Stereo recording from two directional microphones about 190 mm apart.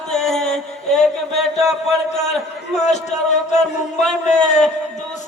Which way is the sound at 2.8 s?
35° left (ahead or behind).